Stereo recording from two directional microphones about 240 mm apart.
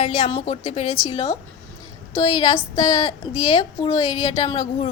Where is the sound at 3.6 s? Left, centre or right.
Centre.